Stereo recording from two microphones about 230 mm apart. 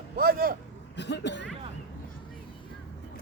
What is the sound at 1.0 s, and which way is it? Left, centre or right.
Speech, left.